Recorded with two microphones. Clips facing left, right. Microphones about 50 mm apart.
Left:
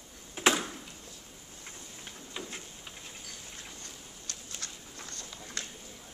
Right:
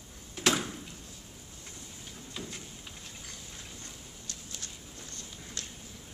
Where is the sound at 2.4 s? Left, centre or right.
Centre.